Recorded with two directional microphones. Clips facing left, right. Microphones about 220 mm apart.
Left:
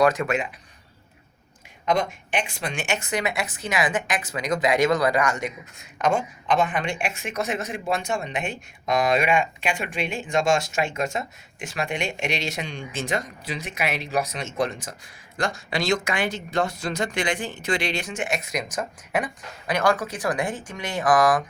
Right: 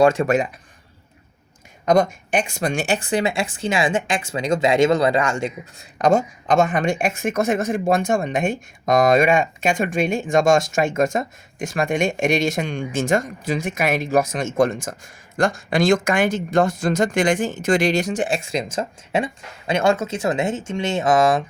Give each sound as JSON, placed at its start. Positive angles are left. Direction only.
{"t": 0.0, "sound": "speech", "side_deg": -30}
{"t": 1.8, "sound": "a woman's voice", "side_deg": -45}